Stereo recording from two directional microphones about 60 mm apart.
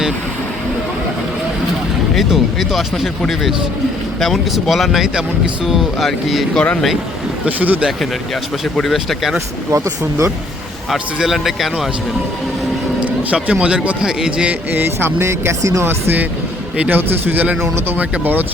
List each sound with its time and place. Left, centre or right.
2.1 s speech: centre
7.4 s speech: right
8.7 s speech: centre
9.7 s speech: right
10.9 s speech: centre
13.0 s speech: centre
14.7 s speech: right
15.8 s speech: right
17.6 s speech: right
17.9 s speech: right